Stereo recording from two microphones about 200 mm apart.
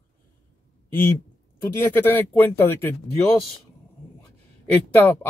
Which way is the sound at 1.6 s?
10° left (ahead or behind).